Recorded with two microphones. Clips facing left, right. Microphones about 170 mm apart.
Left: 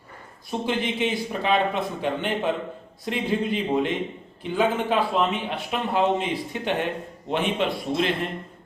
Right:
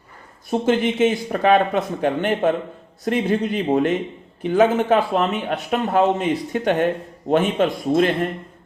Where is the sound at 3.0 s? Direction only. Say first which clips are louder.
Right 5 dB; 50° right (ahead or behind).